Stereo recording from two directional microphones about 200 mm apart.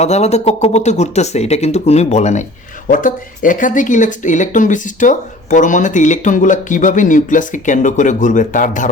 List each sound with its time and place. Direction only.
0.0 s a woman's voice: 35° left (ahead or behind)